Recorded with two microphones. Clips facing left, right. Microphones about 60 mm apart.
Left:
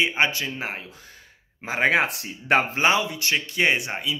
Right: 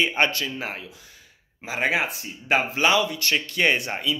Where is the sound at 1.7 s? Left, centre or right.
Left.